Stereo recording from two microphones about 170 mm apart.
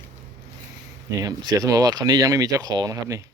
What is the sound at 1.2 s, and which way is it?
Speech, 20° right (ahead or behind).